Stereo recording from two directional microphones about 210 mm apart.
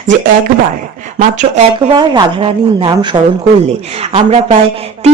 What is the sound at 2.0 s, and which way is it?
A woman's voice, 20° right (ahead or behind).